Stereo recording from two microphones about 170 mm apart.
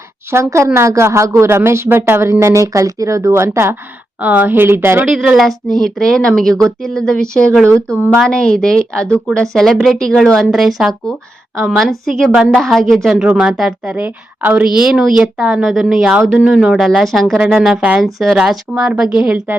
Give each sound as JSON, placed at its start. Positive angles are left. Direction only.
{"t": 0.3, "sound": "a woman's voice", "side_deg": -15}
{"t": 7.9, "sound": "a woman's voice", "side_deg": -10}
{"t": 8.2, "sound": "a woman's voice", "side_deg": 5}